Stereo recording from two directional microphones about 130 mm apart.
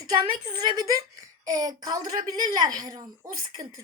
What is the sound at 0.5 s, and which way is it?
A woman's voice, 30° right (ahead or behind).